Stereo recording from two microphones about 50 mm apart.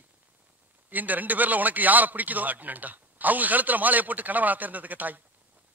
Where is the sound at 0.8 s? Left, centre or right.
Right.